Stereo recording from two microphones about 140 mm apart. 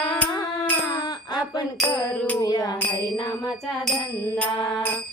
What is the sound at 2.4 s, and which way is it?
Music, 25° left (ahead or behind).